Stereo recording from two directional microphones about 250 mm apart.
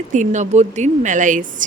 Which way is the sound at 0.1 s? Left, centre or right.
Right.